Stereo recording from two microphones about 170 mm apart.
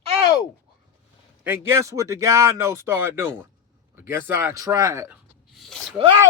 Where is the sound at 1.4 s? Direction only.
15° right (ahead or behind).